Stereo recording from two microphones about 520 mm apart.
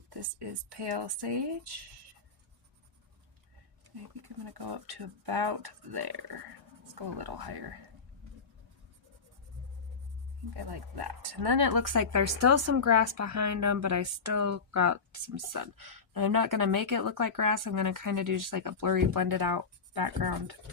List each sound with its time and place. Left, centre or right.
0.1 s speech: right
4.2 s speech: right
10.5 s a woman's voice: right